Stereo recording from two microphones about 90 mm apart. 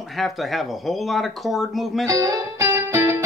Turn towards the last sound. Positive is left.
turn(degrees=-30)  # may be behind; listen again after turning